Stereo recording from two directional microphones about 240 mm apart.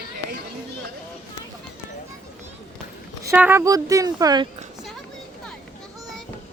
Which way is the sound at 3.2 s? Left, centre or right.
Centre.